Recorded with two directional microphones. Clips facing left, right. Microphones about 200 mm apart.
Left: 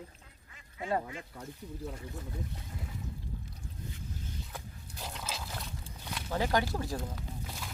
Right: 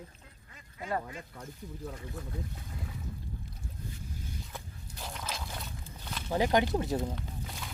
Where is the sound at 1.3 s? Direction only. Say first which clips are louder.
Left 1 dB; 10° left (ahead or behind).